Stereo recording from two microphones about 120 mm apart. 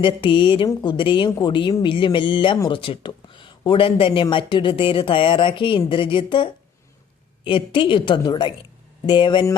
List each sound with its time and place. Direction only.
0.0 s speech: 45° left (ahead or behind)